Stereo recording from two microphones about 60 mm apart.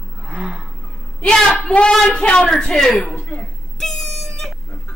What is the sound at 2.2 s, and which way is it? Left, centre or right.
Speech, centre.